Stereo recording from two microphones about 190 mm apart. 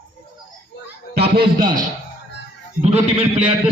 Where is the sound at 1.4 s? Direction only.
50° right (ahead or behind).